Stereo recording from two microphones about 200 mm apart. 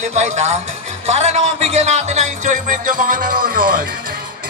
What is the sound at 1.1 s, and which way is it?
Music, 35° right (ahead or behind).